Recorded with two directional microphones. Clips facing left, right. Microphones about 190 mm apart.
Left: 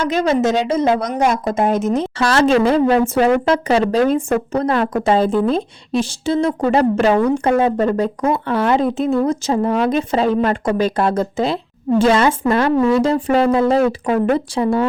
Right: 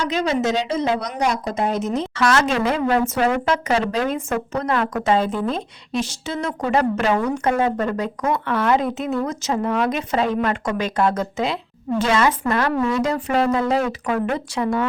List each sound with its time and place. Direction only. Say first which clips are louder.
0.0 s a woman's voice: left 5 dB; 50° left (ahead or behind)
2.1 s a woman's voice: left 5 dB; 30° left (ahead or behind)